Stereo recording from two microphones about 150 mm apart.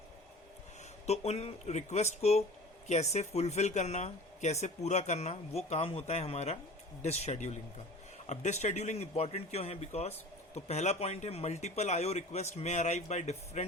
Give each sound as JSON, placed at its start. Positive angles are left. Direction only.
{"t": 1.0, "sound": "speech", "side_deg": 45}